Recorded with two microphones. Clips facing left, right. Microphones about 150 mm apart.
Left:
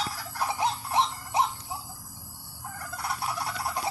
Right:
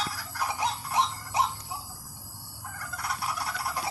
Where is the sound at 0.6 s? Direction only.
25° left (ahead or behind).